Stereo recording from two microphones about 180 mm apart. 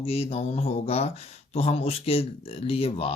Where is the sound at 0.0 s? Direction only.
35° left (ahead or behind).